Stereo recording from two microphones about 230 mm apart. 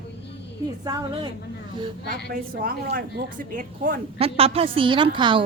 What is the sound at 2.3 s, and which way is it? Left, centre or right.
A woman's voice, right.